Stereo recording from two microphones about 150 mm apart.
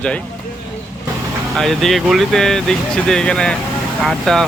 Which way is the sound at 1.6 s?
Centre (ahead or behind).